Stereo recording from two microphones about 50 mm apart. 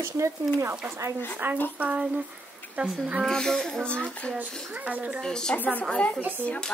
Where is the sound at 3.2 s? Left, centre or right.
Centre.